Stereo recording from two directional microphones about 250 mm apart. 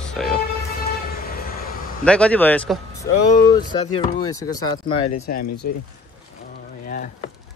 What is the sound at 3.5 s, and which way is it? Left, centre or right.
Speech, centre.